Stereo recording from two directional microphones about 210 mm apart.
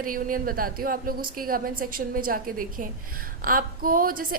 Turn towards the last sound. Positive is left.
turn(degrees=-40)  # may be behind; listen again after turning